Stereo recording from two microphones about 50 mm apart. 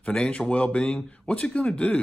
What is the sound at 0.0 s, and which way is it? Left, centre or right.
Speech, left.